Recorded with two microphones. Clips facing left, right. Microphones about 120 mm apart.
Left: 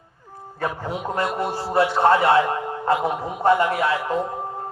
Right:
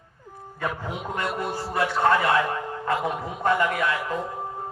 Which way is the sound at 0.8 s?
35° left (ahead or behind).